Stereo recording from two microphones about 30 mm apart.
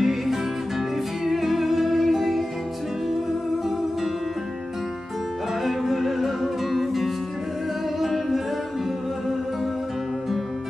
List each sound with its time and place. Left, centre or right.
0.0 s music: centre
5.7 s music: centre